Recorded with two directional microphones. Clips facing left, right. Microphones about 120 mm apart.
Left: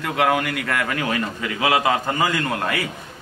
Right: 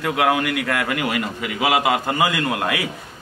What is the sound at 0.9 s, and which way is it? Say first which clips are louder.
A man's voice: right 1 dB; 15° right (ahead or behind).